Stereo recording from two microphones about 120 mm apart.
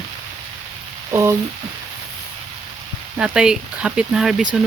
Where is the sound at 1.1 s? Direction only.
25° right (ahead or behind).